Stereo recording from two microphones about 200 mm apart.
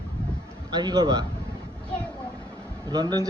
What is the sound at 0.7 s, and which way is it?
Speech, 20° right (ahead or behind).